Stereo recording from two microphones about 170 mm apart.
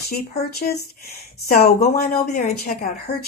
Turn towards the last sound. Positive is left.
turn(degrees=55)  # may be behind; listen again after turning